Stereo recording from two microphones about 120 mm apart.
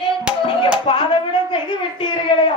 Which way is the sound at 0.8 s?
40° left (ahead or behind).